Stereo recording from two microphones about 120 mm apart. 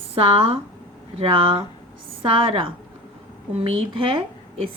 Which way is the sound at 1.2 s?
50° right (ahead or behind).